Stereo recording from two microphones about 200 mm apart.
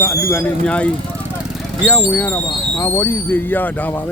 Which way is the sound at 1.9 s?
10° left (ahead or behind).